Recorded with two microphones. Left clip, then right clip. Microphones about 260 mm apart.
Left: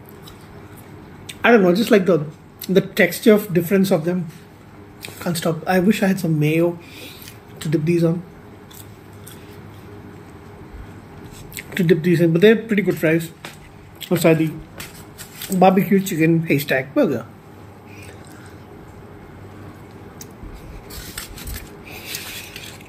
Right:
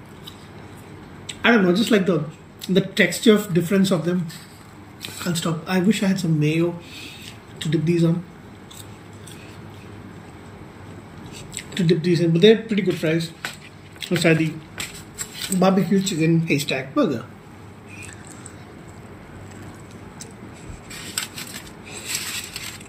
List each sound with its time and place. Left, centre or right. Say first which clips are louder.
1.4 s speech: left 4 dB; centre
11.5 s speech: left 4 dB; centre
14.0 s speech: left 3 dB; left
15.3 s speech: left 5 dB; centre